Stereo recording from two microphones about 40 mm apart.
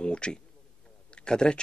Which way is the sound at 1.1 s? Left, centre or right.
Left.